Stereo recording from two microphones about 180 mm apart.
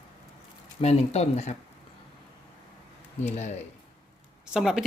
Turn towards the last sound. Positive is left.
turn(degrees=-5)  # may be behind; listen again after turning